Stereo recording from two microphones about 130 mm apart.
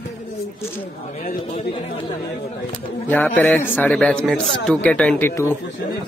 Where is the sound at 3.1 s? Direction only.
15° left (ahead or behind).